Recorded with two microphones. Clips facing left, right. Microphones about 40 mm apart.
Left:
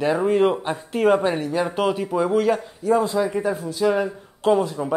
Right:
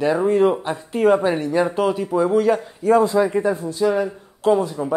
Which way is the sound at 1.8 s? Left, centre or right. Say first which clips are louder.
Right 2 dB; centre.